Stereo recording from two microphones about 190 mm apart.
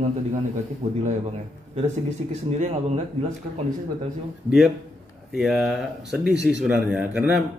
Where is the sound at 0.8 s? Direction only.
30° right (ahead or behind).